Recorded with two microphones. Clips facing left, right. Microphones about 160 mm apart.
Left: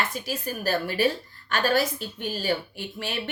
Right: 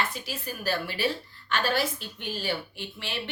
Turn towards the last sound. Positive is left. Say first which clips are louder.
# left 4 dB
turn(degrees=45)  # may be behind; listen again after turning